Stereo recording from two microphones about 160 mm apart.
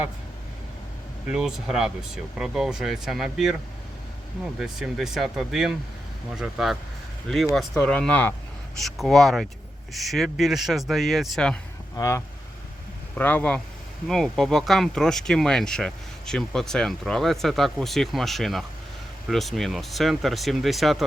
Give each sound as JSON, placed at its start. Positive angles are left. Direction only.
{"t": 1.3, "sound": "speech", "side_deg": -5}
{"t": 4.6, "sound": "speech", "side_deg": 0}
{"t": 11.9, "sound": "speech", "side_deg": 20}